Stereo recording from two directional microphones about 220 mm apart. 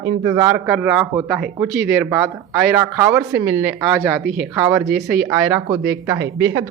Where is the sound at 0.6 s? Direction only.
5° right (ahead or behind).